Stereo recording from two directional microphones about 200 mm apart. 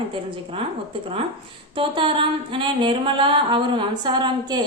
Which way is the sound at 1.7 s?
25° right (ahead or behind).